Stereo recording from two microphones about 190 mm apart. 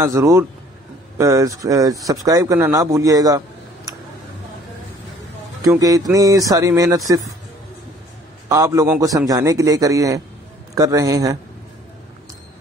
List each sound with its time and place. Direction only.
0.0 s a man's voice: 15° right (ahead or behind)
5.6 s a man's voice: 20° right (ahead or behind)
8.5 s a man's voice: 15° right (ahead or behind)